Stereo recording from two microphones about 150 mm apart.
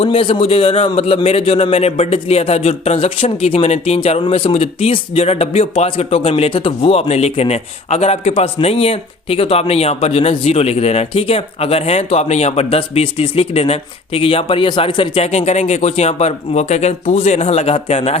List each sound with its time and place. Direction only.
0.0 s speech: 40° left (ahead or behind)